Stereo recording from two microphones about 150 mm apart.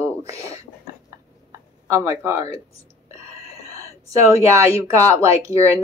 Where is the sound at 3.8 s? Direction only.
20° right (ahead or behind).